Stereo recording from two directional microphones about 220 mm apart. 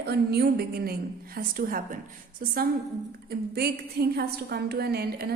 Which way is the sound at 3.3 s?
45° right (ahead or behind).